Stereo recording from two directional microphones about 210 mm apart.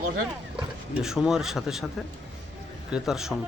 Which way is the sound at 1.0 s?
Centre (ahead or behind).